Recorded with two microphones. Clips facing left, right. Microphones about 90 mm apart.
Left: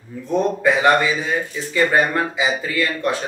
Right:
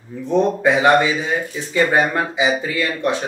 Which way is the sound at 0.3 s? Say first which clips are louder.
Right 2 dB; 20° right (ahead or behind).